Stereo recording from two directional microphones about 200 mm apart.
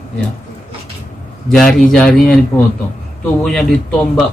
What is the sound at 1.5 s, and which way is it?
Speech, 5° left (ahead or behind).